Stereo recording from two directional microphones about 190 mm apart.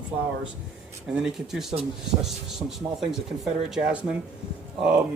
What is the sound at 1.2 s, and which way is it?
Speech, 5° right (ahead or behind).